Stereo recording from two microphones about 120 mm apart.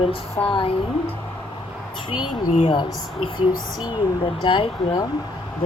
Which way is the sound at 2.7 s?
40° left (ahead or behind).